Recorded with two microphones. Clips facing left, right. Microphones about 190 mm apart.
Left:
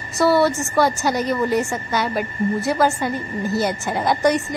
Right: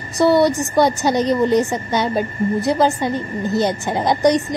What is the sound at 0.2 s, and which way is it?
A woman's voice, 15° right (ahead or behind).